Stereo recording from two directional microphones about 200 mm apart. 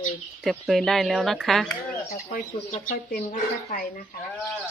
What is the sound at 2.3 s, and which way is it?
Speech, 40° left (ahead or behind).